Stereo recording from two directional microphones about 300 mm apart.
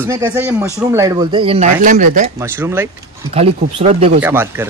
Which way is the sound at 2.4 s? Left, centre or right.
Centre.